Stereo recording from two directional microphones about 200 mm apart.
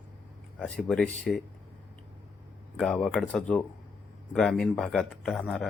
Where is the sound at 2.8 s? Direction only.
5° left (ahead or behind).